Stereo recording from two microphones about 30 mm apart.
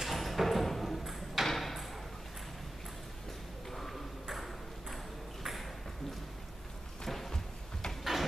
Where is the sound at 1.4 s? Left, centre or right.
Centre.